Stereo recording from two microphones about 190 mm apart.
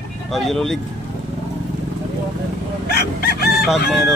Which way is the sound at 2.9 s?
55° left (ahead or behind).